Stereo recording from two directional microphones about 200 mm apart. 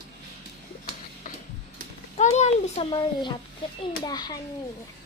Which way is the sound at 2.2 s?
35° left (ahead or behind).